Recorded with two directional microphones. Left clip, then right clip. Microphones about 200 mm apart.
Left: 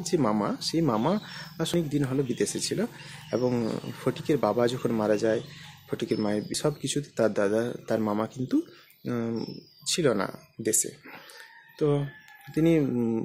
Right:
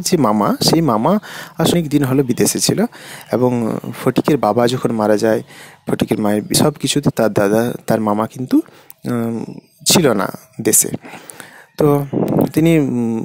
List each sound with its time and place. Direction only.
0.0 s speech: 45° right (ahead or behind)